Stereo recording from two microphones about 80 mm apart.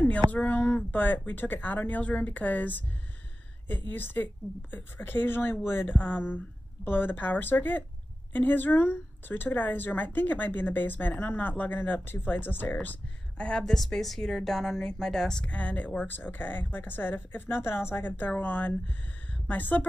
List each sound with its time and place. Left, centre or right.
0.3 s a woman's voice: centre
3.9 s a woman's voice: left
13.4 s a woman's voice: centre